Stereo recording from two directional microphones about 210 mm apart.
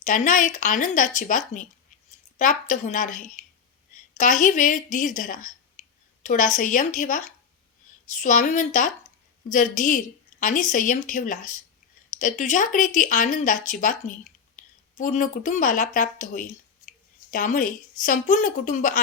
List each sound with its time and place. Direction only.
0.0 s speech: 40° left (ahead or behind)
2.4 s speech: 40° left (ahead or behind)
4.2 s a woman's voice: 35° left (ahead or behind)